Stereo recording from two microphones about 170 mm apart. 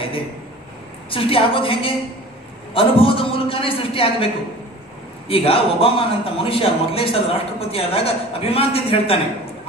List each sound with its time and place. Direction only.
1.1 s a man's voice: 30° left (ahead or behind)
5.3 s a man's voice: 35° left (ahead or behind)